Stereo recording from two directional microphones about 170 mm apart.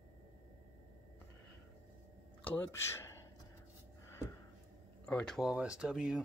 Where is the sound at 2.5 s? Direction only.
15° left (ahead or behind).